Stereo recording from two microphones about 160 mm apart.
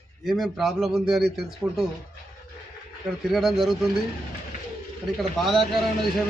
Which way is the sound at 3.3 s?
Centre (ahead or behind).